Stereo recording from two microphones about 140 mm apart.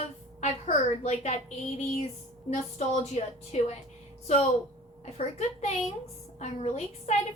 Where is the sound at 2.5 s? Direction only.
55° left (ahead or behind).